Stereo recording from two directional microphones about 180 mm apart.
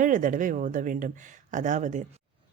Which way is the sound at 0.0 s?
45° right (ahead or behind).